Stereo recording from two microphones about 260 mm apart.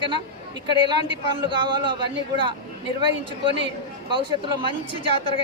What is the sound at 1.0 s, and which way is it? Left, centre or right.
A man's voice, centre.